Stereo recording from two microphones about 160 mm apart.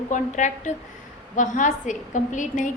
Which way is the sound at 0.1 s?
50° left (ahead or behind).